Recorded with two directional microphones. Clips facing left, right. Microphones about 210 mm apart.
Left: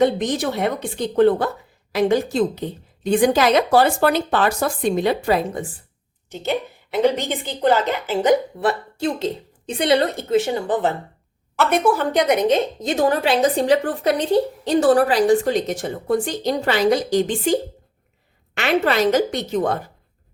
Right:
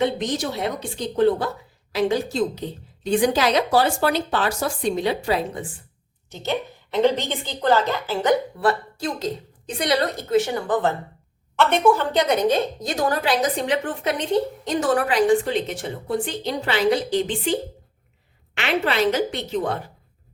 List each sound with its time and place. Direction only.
0.0 s a woman's voice: 55° left (ahead or behind)
6.3 s a woman's voice: 15° left (ahead or behind)
11.5 s a woman's voice: 5° left (ahead or behind); by 19.8 s 45° left (ahead or behind)